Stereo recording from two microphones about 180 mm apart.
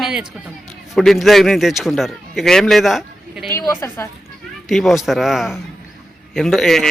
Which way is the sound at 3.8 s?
15° left (ahead or behind).